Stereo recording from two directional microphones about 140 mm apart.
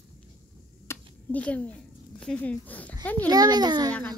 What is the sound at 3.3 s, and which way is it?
Child singing, 30° right (ahead or behind).